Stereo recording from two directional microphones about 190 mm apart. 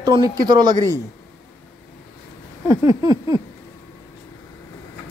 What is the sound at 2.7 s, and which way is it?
Speech, 15° right (ahead or behind).